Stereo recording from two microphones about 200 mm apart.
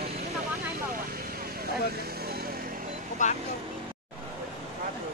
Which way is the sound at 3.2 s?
40° left (ahead or behind).